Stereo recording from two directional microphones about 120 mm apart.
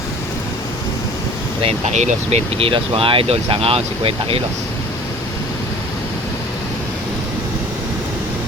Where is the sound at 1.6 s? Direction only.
65° right (ahead or behind).